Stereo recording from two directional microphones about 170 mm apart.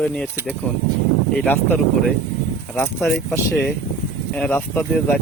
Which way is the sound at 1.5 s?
10° left (ahead or behind).